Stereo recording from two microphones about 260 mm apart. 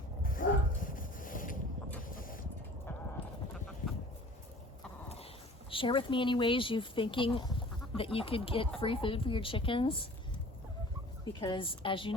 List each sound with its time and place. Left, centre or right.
0.2 s boat: left
2.1 s vehicle: left
3.2 s a sound: left
5.7 s speech: centre
11.3 s speech: centre